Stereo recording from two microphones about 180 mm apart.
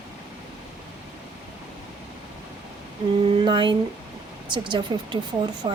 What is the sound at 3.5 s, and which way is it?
A woman's voice, 25° right (ahead or behind).